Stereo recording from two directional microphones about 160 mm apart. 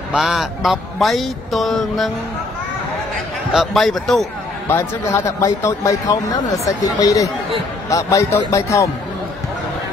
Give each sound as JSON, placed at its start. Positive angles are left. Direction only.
{"t": 0.1, "sound": "a man's voice", "side_deg": 0}
{"t": 3.5, "sound": "a man's voice", "side_deg": 0}
{"t": 4.6, "sound": "speech", "side_deg": 15}